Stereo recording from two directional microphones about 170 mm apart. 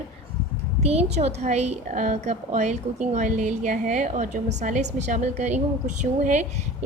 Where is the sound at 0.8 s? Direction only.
35° right (ahead or behind).